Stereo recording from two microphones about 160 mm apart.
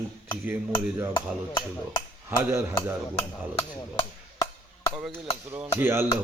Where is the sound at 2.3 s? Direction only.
15° right (ahead or behind).